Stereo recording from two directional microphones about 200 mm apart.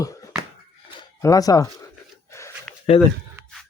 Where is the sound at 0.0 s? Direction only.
15° left (ahead or behind).